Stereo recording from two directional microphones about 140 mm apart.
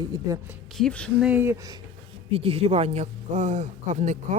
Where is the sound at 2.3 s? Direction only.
45° right (ahead or behind); by 4.4 s 60° right (ahead or behind).